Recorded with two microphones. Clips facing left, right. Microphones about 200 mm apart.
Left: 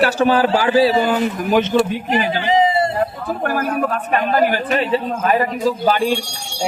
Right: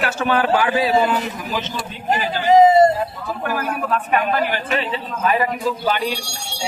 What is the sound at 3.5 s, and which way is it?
A man's voice, 45° left (ahead or behind).